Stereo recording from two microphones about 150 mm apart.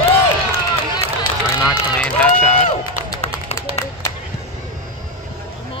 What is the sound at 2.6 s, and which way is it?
Run, 50° left (ahead or behind).